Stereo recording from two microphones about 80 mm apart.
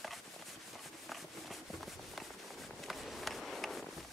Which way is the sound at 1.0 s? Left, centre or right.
Centre.